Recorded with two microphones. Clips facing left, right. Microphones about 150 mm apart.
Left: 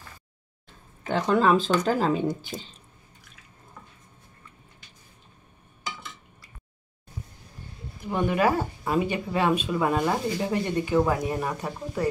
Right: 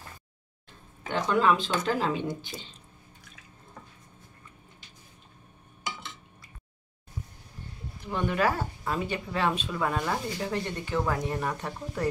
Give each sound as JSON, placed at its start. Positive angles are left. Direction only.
{"t": 1.0, "sound": "speech", "side_deg": 40}
{"t": 8.0, "sound": "speech", "side_deg": 10}